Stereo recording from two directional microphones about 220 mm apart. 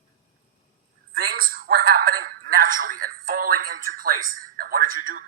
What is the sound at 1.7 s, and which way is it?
A man's voice, 40° right (ahead or behind).